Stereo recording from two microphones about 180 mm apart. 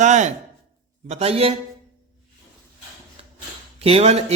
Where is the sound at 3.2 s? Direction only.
35° right (ahead or behind).